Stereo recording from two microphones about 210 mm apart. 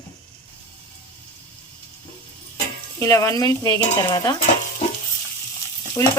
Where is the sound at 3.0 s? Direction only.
15° left (ahead or behind).